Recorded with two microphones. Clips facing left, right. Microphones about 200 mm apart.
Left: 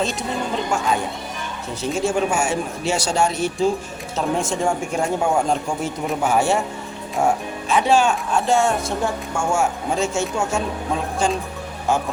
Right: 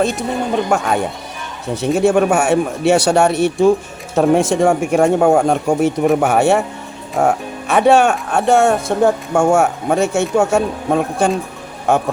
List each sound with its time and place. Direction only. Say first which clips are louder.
0.0 s speech: right 6 dB; 60° right (ahead or behind)